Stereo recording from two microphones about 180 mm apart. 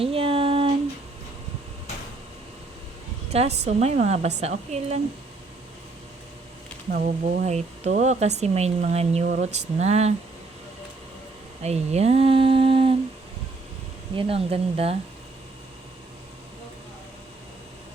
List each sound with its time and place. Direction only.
0.0 s a sound: 30° right (ahead or behind)
3.2 s a woman's voice: 35° right (ahead or behind)
6.9 s speech: 50° right (ahead or behind)
7.4 s speech: 40° right (ahead or behind)
11.6 s humming: 35° right (ahead or behind)
14.2 s speech: 30° right (ahead or behind)